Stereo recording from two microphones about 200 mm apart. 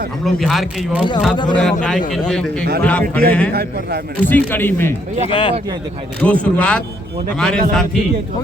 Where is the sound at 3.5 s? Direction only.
50° right (ahead or behind).